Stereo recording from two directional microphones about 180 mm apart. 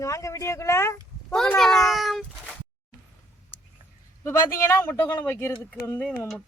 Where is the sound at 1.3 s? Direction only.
5° left (ahead or behind).